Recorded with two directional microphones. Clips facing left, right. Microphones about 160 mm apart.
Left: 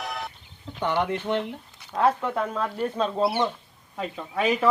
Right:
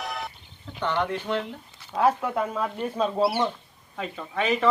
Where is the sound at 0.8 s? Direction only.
15° left (ahead or behind).